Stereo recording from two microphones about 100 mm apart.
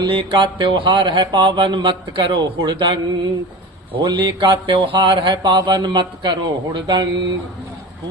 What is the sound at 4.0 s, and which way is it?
A man's voice, 50° right (ahead or behind).